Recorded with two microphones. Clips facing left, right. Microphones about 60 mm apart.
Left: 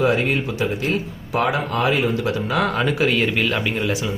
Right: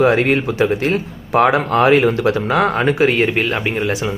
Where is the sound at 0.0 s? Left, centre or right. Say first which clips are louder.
Right 5 dB; right.